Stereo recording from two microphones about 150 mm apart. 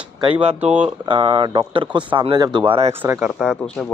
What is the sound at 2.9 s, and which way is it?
Speech, 15° right (ahead or behind).